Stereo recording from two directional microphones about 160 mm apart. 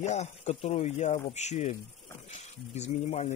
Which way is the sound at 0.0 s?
45° left (ahead or behind).